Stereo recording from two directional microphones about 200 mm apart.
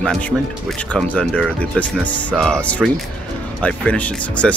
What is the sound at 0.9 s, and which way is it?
Speech, 5° left (ahead or behind).